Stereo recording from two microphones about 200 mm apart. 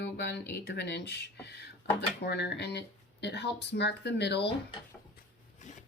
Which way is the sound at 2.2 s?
55° left (ahead or behind).